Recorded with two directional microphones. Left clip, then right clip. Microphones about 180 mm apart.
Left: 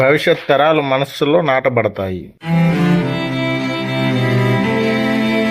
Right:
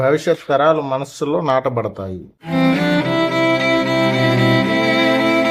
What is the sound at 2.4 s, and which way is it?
Music, centre (ahead or behind).